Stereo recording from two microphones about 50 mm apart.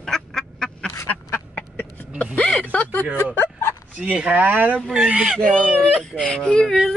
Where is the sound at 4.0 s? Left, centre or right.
Right.